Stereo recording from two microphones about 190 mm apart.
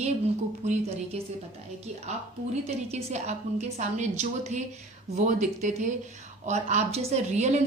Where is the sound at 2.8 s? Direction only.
35° right (ahead or behind).